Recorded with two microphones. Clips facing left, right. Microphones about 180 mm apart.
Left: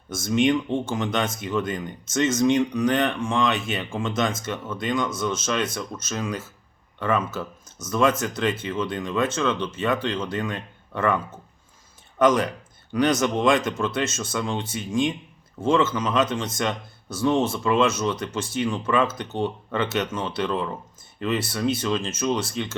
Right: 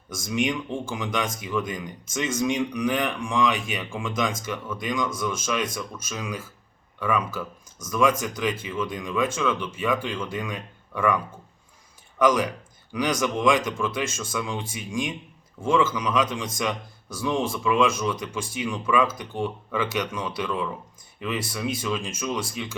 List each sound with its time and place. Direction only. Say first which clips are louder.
0.1 s speech: left 5 dB; 10° right (ahead or behind)
4.5 s speech: left 1 dB; 25° left (ahead or behind)
4.8 s speech: left 3 dB; 10° right (ahead or behind)
13.0 s speech: left 3 dB; 10° right (ahead or behind)